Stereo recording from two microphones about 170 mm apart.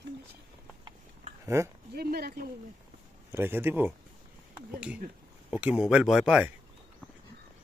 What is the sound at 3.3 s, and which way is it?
Speech, 15° right (ahead or behind).